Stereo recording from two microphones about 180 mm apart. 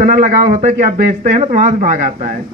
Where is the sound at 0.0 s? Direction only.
45° right (ahead or behind).